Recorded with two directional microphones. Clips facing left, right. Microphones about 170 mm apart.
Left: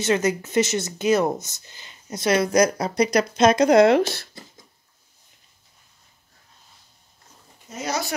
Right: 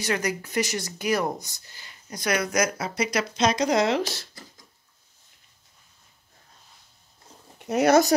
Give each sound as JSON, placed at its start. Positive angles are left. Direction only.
{"t": 0.0, "sound": "speech", "side_deg": 25}
{"t": 4.3, "sound": "a sound", "side_deg": 25}
{"t": 7.5, "sound": "speech", "side_deg": -65}